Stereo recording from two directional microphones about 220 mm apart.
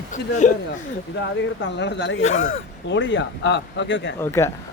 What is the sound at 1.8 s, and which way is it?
Speech, 50° left (ahead or behind).